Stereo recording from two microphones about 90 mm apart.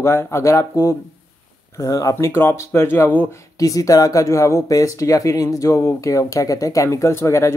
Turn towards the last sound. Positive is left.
turn(degrees=35)  # may be behind; listen again after turning